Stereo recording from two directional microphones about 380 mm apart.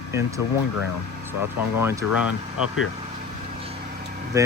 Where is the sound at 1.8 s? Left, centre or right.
Centre.